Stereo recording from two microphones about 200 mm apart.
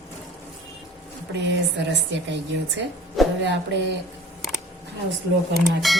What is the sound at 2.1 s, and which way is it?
Speech, 65° right (ahead or behind).